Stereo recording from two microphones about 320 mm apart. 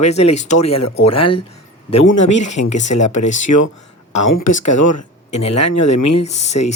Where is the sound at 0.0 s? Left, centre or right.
Centre.